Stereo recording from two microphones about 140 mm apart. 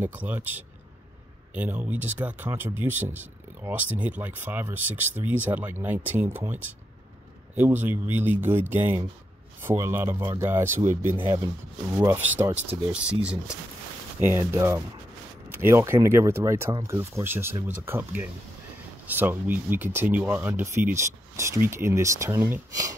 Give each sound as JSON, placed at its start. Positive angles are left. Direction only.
{"t": 0.0, "sound": "speech", "side_deg": -10}
{"t": 12.9, "sound": "speech", "side_deg": -10}